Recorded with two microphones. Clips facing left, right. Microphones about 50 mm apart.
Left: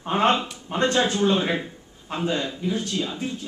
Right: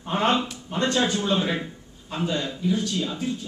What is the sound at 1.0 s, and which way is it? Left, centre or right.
A man's voice, centre.